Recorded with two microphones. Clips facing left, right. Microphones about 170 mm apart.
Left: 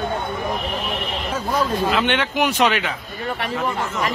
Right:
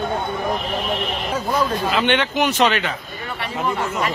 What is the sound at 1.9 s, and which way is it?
Speech, centre (ahead or behind).